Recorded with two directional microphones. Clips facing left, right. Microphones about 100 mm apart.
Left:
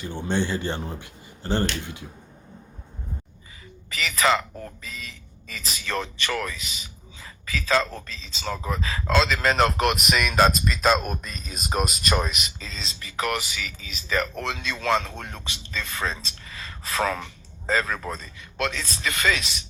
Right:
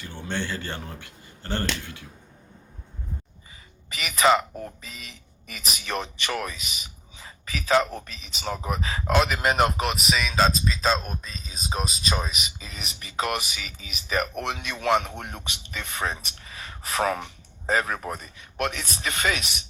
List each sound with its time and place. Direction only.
0.0 s speech: 20° left (ahead or behind)
3.8 s a man's voice: 20° right (ahead or behind)
9.8 s speech: 5° left (ahead or behind)
12.1 s speech: 10° right (ahead or behind)